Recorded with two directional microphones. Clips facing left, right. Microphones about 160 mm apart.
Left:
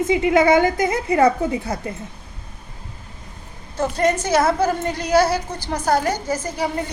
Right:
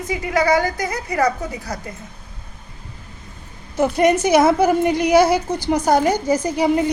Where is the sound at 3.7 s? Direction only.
15° right (ahead or behind).